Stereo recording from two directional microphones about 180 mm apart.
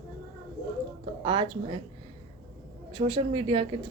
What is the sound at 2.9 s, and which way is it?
Speech, 30° right (ahead or behind).